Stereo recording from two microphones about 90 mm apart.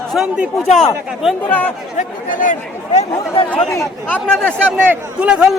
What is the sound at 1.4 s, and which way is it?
Speech, 20° left (ahead or behind).